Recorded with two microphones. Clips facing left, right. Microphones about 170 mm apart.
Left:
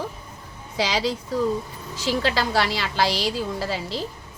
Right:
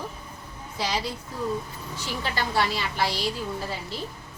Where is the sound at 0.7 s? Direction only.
90° left.